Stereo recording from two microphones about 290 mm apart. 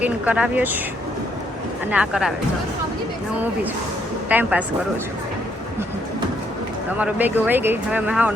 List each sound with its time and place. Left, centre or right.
0.0 s speech: centre
1.9 s speech: centre
4.3 s speech: centre
7.0 s speech: centre